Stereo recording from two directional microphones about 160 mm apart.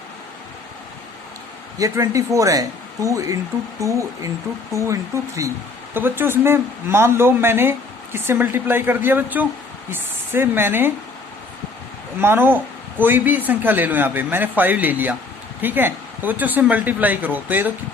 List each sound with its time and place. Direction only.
1.8 s speech: 20° right (ahead or behind)
12.2 s speech: 15° right (ahead or behind)